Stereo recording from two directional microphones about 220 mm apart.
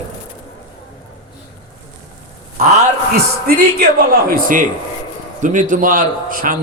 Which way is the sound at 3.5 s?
45° right (ahead or behind).